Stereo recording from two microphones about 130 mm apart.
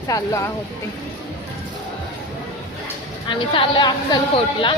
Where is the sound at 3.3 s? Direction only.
35° left (ahead or behind).